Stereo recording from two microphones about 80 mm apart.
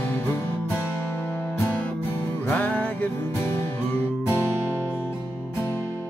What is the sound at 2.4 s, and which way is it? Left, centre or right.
Music, left.